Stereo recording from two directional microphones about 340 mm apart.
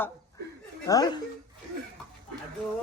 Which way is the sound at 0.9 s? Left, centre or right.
Centre.